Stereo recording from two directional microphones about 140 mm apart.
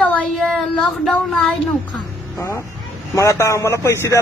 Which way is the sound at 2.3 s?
25° left (ahead or behind).